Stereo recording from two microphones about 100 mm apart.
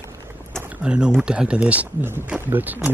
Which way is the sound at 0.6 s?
10° right (ahead or behind).